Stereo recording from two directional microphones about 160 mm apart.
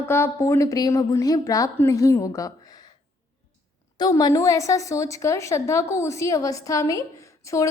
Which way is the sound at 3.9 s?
25° left (ahead or behind).